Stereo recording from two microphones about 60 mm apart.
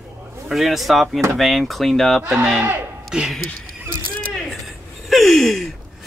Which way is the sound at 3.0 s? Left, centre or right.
Centre.